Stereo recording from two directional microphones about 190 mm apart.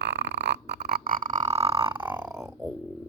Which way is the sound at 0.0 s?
65° right (ahead or behind).